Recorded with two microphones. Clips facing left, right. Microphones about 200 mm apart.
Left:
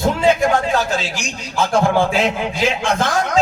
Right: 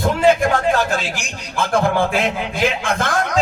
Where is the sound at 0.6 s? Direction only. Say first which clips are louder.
Right 1 dB; 55° right (ahead or behind).